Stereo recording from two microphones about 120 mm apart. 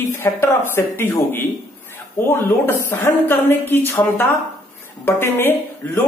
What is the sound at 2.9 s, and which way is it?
Speech, 20° left (ahead or behind).